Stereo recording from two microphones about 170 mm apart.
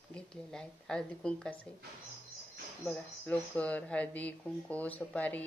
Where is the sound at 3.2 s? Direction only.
10° left (ahead or behind).